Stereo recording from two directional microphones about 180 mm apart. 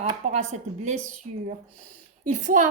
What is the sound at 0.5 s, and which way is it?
Speech, 40° right (ahead or behind).